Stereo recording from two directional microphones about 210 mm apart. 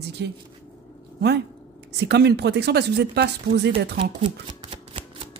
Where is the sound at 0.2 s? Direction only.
55° right (ahead or behind).